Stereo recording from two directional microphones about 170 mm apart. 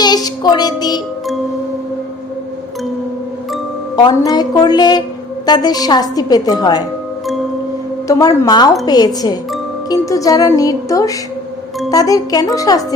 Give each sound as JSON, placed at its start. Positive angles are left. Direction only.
{"t": 0.0, "sound": "music", "side_deg": 25}
{"t": 3.9, "sound": "a woman's voice", "side_deg": 25}
{"t": 8.0, "sound": "a woman's voice", "side_deg": 25}